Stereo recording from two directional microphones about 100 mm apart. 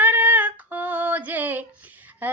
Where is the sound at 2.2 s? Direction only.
15° right (ahead or behind).